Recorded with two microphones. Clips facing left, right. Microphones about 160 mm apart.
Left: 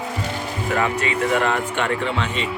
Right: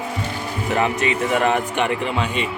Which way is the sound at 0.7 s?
20° right (ahead or behind).